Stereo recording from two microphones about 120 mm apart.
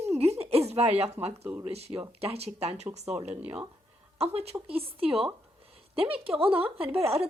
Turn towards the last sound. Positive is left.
turn(degrees=-55)  # may be behind; listen again after turning